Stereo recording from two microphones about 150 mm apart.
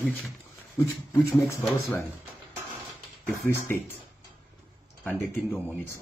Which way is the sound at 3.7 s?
15° left (ahead or behind).